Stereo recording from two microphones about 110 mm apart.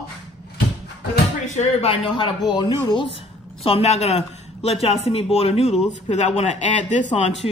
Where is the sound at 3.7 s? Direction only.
70° left (ahead or behind); by 7.5 s 90° left.